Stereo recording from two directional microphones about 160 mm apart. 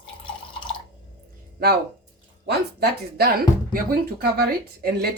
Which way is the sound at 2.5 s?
85° right.